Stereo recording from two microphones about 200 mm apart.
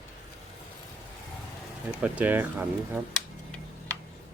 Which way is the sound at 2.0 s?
5° right (ahead or behind).